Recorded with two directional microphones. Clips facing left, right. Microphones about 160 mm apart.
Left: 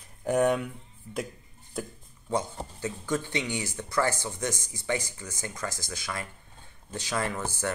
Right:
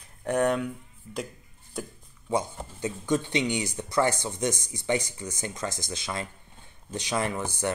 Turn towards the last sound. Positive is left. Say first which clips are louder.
# right 2 dB
turn(degrees=-15)  # may be behind; listen again after turning